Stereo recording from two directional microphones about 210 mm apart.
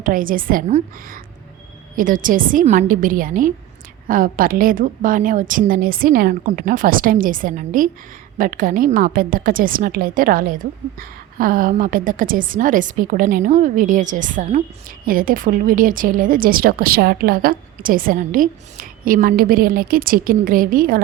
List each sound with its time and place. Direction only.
0.0 s a woman's voice: 40° right (ahead or behind)